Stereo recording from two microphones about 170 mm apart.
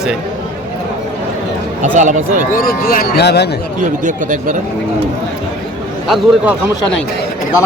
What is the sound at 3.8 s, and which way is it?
Speech, 50° right (ahead or behind).